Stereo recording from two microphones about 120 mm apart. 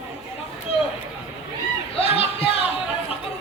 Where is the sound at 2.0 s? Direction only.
55° left (ahead or behind).